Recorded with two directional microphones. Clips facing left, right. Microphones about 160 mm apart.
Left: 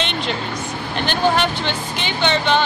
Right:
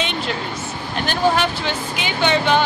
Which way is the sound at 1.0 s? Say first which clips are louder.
Even; 5° right (ahead or behind).